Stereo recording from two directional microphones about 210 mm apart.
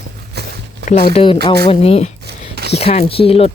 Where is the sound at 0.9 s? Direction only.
30° left (ahead or behind).